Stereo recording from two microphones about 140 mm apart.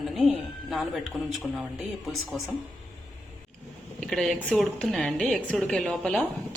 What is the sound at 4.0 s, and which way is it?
Speech, 5° left (ahead or behind).